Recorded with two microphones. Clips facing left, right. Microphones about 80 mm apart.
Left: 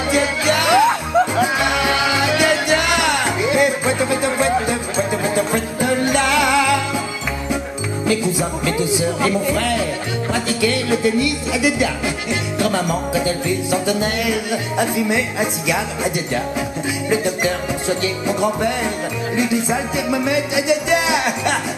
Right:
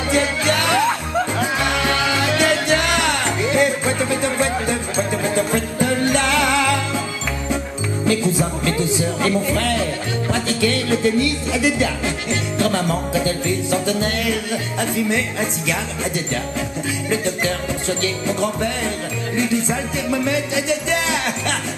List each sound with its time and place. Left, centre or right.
0.1 s music: centre
8.1 s music: centre
17.1 s music: centre